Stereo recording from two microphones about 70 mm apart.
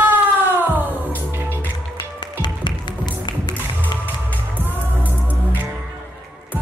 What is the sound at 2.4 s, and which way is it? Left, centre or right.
Music, left.